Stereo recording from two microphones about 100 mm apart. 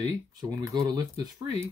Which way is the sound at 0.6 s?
40° right (ahead or behind).